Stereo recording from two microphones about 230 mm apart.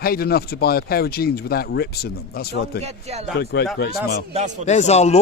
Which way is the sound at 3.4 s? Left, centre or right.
Left.